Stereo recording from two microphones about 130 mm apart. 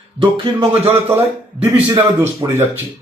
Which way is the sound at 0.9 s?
15° right (ahead or behind).